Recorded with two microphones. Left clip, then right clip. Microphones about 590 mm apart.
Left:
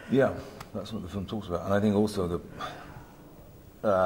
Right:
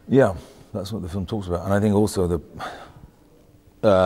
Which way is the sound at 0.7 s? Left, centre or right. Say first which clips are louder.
Right 7 dB; right.